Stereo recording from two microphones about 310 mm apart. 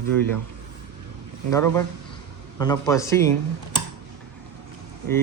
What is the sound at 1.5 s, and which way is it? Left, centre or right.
Speech, centre.